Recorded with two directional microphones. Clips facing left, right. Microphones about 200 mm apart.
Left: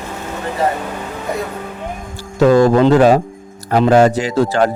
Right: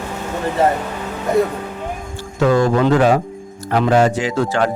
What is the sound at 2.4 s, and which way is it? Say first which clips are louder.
Speech: left 5 dB; 40° left (ahead or behind).